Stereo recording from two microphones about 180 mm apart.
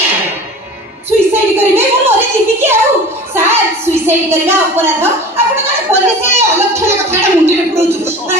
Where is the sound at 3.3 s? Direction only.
15° right (ahead or behind).